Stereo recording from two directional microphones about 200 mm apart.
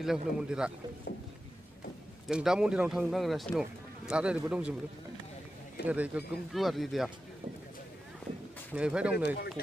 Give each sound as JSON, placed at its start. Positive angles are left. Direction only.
{"t": 0.0, "sound": "a man's voice", "side_deg": -5}
{"t": 2.2, "sound": "a man's voice", "side_deg": -5}
{"t": 5.9, "sound": "a man's voice", "side_deg": -5}
{"t": 8.7, "sound": "a man's voice", "side_deg": -5}
{"t": 9.1, "sound": "speech", "side_deg": 55}